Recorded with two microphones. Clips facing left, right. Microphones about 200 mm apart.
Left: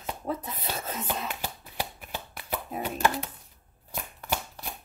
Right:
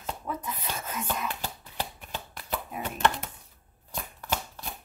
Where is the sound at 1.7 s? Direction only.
10° left (ahead or behind).